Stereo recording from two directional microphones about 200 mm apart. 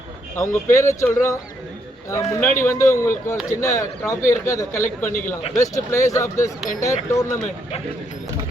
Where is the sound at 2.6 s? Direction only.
15° left (ahead or behind).